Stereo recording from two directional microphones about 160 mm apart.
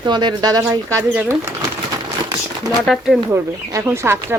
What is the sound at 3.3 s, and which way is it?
Speech, 15° right (ahead or behind).